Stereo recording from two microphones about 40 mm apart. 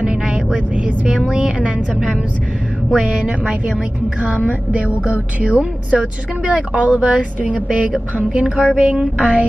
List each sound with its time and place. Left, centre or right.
0.7 s music: right
3.0 s music: right
5.6 s a woman's voice: right
6.4 s music: right
7.6 s a woman's voice: right
8.3 s music: right
8.7 s a woman's voice: right
9.2 s music: right